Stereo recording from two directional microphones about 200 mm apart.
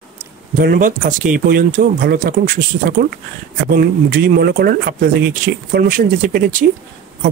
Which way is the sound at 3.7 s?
50° right (ahead or behind).